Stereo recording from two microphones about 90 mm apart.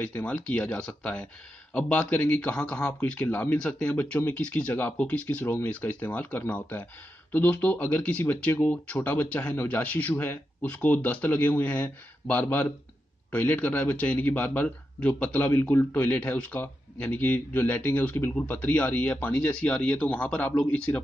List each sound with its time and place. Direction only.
0.0 s a man's voice: 15° left (ahead or behind)